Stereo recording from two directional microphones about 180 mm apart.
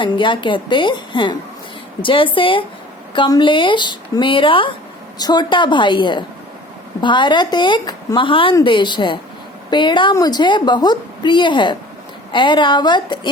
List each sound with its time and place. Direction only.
0.0 s a woman's voice: 25° left (ahead or behind)